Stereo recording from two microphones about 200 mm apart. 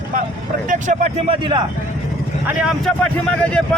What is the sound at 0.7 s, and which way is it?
Speech, 35° right (ahead or behind).